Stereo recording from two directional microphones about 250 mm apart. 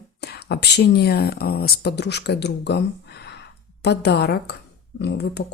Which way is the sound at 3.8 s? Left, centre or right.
Left.